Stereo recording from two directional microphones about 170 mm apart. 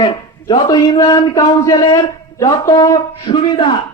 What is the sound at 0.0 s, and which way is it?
A man's voice, 25° left (ahead or behind).